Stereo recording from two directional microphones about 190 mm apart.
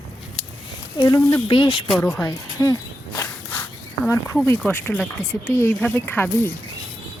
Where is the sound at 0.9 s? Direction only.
20° left (ahead or behind).